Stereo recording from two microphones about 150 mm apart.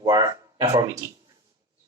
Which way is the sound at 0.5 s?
40° right (ahead or behind).